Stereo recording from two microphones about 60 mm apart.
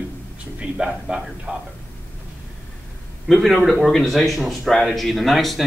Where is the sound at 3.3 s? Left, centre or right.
Centre.